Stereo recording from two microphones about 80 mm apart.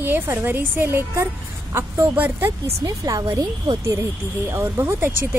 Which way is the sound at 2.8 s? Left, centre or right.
Right.